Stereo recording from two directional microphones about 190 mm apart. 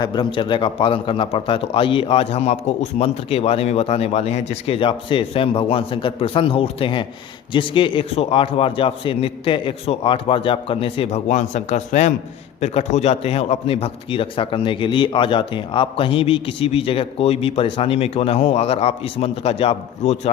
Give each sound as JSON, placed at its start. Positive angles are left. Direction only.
{"t": 0.0, "sound": "a man's voice", "side_deg": 25}